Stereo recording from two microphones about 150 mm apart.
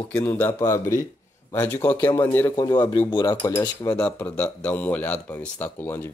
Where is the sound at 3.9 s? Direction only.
10° left (ahead or behind).